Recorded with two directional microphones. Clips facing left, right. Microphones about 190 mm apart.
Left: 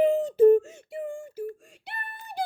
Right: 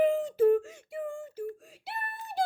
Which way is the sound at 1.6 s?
5° right (ahead or behind).